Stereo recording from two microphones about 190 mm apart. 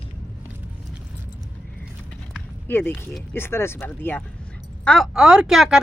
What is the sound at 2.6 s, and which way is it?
Speech, 10° left (ahead or behind).